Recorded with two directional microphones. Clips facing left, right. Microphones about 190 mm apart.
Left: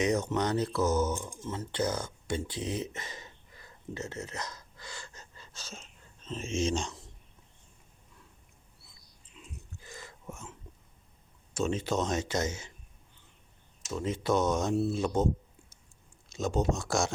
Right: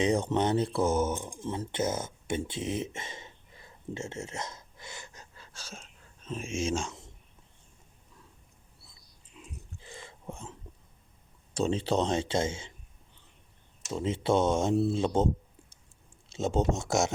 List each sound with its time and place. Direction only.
0.0 s speech: 30° right (ahead or behind); by 6.9 s 10° right (ahead or behind)
9.8 s a sound: 25° right (ahead or behind)
11.5 s speech: 30° right (ahead or behind)
13.9 s speech: 25° right (ahead or behind)
16.3 s speech: 25° right (ahead or behind)